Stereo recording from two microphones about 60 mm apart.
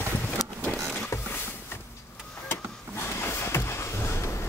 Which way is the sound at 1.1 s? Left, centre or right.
Left.